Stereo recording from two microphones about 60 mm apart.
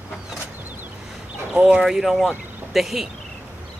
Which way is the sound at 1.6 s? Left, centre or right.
Centre.